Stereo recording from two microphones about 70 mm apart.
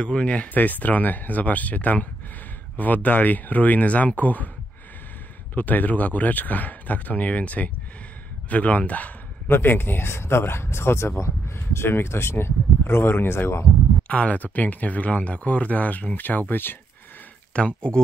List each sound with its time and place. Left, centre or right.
0.0 s speech: centre
5.5 s speech: left
9.5 s speech: left
14.0 s speech: centre
17.6 s speech: centre